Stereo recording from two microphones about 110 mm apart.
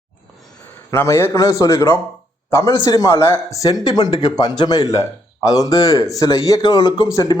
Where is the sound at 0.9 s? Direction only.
25° left (ahead or behind).